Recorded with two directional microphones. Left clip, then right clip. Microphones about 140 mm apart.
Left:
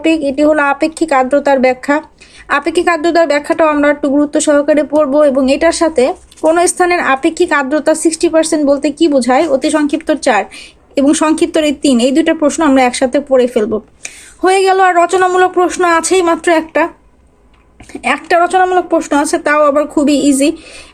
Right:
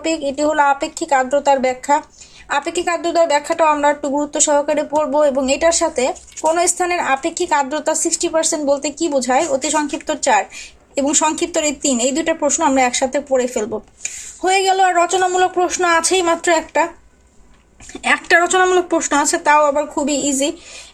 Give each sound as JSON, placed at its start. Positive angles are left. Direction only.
{"t": 0.0, "sound": "speech", "side_deg": 30}
{"t": 17.9, "sound": "speech", "side_deg": 10}
{"t": 19.5, "sound": "speech", "side_deg": 35}